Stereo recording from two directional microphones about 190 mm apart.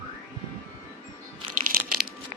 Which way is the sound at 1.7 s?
50° right (ahead or behind).